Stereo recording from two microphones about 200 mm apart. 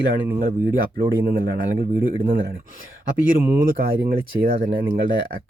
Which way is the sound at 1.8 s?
45° right (ahead or behind).